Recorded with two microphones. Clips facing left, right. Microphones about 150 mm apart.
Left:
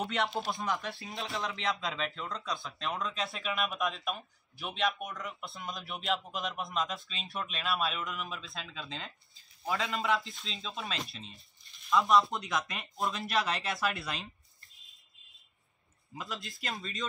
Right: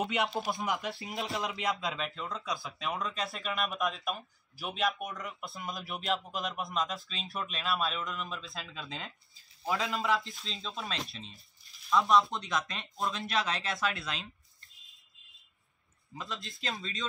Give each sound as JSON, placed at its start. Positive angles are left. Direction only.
{"t": 0.1, "sound": "speech", "side_deg": 0}
{"t": 0.8, "sound": "speech", "side_deg": -20}
{"t": 1.1, "sound": "speech", "side_deg": 0}
{"t": 16.2, "sound": "speech", "side_deg": 0}